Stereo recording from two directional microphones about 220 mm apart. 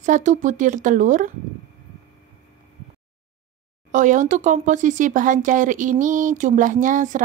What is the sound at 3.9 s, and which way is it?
Speech, 35° right (ahead or behind).